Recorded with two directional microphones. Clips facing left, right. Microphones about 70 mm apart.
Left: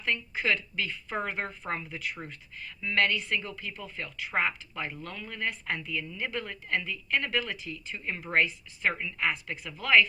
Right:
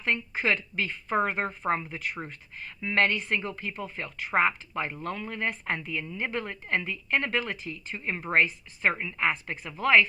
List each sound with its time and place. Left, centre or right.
0.0 s speech: right
2.0 s speech: right
2.2 s speech: right
9.6 s speech: right